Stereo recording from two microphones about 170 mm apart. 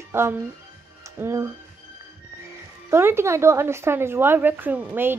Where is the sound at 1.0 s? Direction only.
15° right (ahead or behind).